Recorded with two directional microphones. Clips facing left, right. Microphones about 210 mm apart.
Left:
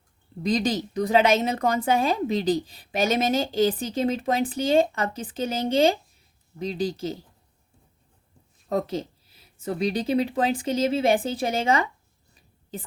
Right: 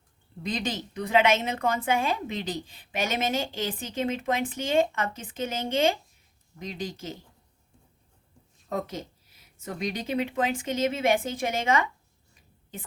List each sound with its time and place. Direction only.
0.4 s a woman's voice: 35° left (ahead or behind)
8.7 s a woman's voice: 30° left (ahead or behind)
12.3 s a sound: 35° left (ahead or behind)